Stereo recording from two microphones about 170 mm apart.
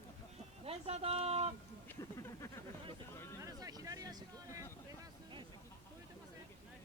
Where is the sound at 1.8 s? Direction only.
20° left (ahead or behind).